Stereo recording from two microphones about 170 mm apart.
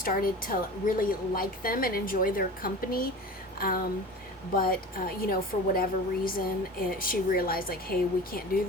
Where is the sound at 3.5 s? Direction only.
60° left (ahead or behind).